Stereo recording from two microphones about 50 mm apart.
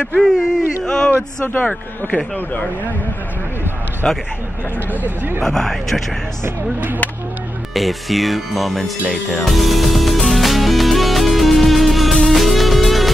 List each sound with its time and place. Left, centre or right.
0.0 s speech: centre
1.4 s a man's voice: left
4.0 s speech: centre
5.4 s speech: centre
7.7 s speech: centre
9.4 s music: centre